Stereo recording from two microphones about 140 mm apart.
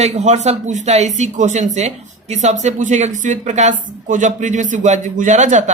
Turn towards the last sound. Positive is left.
turn(degrees=-60)  # may be behind; listen again after turning